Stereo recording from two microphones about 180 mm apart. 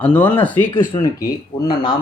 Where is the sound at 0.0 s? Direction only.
10° left (ahead or behind).